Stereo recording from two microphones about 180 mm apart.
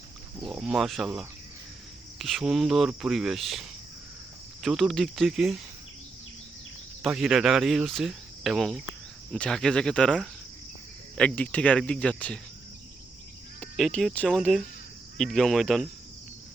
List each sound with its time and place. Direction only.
0.4 s speech: 5° right (ahead or behind)
7.0 s speech: 5° right (ahead or behind)
13.6 s speech: centre (ahead or behind)